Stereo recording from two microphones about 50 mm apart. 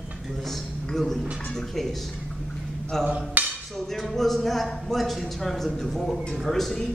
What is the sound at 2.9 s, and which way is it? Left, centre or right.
Speech, centre.